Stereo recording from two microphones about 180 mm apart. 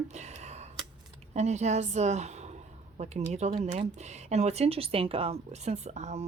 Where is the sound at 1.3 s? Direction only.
40° right (ahead or behind).